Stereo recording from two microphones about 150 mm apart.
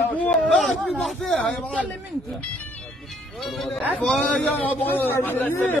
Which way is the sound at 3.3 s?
Centre (ahead or behind).